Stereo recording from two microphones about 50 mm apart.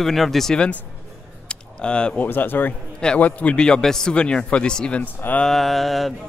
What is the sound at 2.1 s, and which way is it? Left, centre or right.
Speech, left.